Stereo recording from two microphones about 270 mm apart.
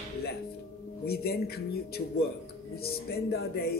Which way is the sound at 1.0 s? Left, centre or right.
Left.